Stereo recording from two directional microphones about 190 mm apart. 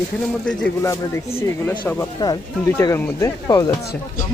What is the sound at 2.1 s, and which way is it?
Speech, 20° left (ahead or behind).